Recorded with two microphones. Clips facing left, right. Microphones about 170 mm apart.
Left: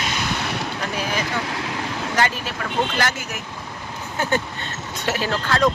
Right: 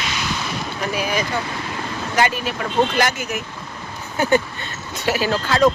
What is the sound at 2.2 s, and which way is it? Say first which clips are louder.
Speech: right 4 dB; 10° right (ahead or behind).